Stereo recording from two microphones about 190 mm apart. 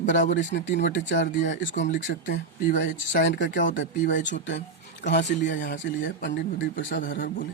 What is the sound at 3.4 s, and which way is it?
Speech, 45° left (ahead or behind).